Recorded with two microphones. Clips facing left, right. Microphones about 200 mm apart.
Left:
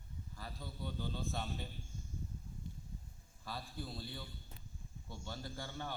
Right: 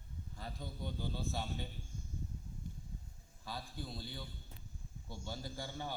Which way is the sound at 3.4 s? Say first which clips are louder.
Even; centre (ahead or behind).